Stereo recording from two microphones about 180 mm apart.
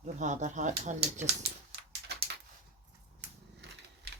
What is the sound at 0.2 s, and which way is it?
Speech, 40° right (ahead or behind).